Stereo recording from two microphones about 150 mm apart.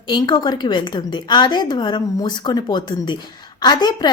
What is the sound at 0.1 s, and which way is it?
A woman's voice, 30° left (ahead or behind).